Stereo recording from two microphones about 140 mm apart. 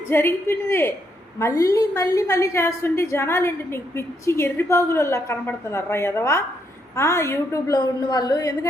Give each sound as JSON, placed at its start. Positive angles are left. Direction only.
{"t": 0.1, "sound": "a woman's voice", "side_deg": 15}